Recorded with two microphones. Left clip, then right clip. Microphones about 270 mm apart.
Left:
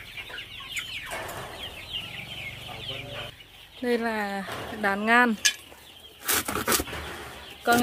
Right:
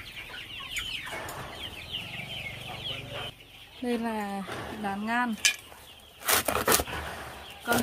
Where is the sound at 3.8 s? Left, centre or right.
Centre.